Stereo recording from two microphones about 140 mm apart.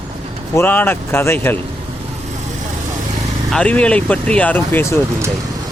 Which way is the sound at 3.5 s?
10° left (ahead or behind).